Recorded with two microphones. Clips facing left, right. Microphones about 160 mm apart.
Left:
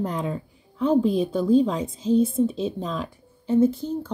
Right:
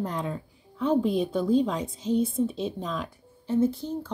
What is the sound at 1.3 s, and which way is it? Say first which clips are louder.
Speech: left 4 dB; 20° left (ahead or behind).